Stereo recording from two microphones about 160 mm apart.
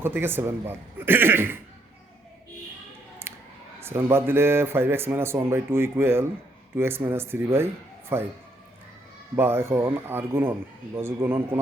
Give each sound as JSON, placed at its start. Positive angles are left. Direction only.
{"t": 0.0, "sound": "speech", "side_deg": -15}
{"t": 3.2, "sound": "scissors", "side_deg": -15}
{"t": 3.8, "sound": "speech", "side_deg": -15}
{"t": 9.3, "sound": "speech", "side_deg": -15}